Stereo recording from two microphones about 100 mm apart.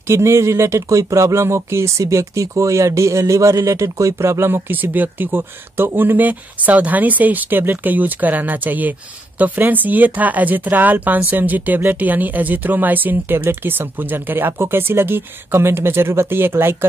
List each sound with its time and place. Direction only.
0.0 s speech: 25° right (ahead or behind)